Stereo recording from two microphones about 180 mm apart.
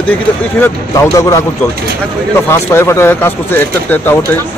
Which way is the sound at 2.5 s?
15° left (ahead or behind).